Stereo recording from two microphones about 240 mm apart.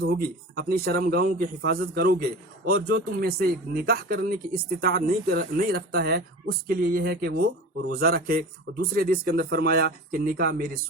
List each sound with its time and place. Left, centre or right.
0.0 s a man's voice: right